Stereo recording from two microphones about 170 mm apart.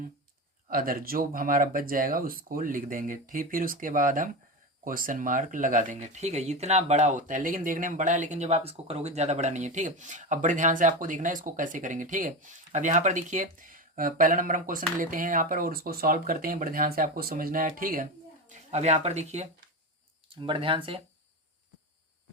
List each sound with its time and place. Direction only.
0.7 s speech: 55° right (ahead or behind); by 19.5 s 40° right (ahead or behind)
20.3 s speech: 30° right (ahead or behind)